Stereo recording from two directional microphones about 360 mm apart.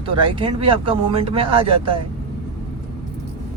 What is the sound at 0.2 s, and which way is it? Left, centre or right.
Speech, centre.